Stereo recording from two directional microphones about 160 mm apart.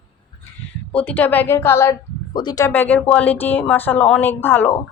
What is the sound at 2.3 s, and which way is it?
Speech, 25° left (ahead or behind).